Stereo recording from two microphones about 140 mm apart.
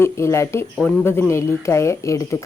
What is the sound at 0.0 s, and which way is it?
Speech, 20° left (ahead or behind).